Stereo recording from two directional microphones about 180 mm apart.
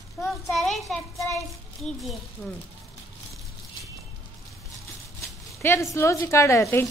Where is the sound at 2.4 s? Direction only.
5° left (ahead or behind).